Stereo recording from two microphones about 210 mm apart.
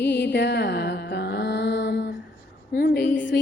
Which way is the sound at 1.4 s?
55° left (ahead or behind).